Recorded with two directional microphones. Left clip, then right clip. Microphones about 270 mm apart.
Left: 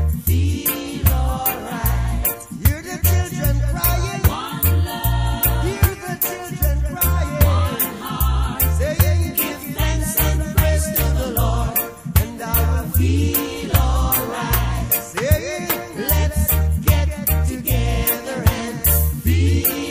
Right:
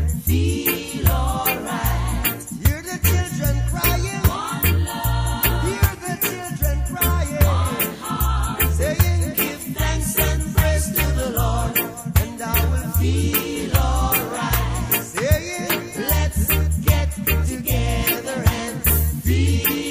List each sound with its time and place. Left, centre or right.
3.3 s music: centre
5.7 s music: centre
8.8 s music: centre
15.1 s music: centre
17.7 s music: centre